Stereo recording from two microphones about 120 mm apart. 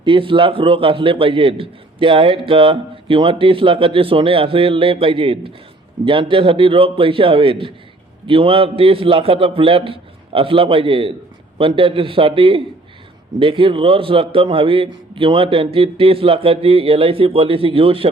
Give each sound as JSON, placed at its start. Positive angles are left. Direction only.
{"t": 0.0, "sound": "a man's voice", "side_deg": -45}